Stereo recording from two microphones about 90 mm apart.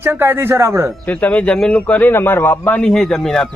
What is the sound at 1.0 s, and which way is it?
A man's voice, 15° left (ahead or behind).